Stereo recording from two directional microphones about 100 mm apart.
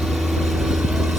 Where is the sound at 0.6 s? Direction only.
5° right (ahead or behind).